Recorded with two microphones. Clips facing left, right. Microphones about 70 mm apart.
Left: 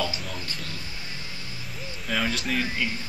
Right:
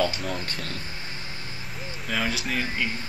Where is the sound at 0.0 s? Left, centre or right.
Right.